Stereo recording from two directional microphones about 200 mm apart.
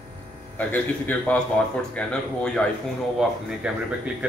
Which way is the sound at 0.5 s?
5° left (ahead or behind).